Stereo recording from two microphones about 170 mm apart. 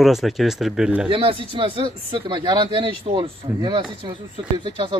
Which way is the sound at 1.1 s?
30° right (ahead or behind).